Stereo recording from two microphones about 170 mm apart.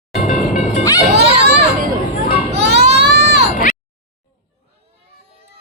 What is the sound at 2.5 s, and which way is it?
Baby cry, 80° right.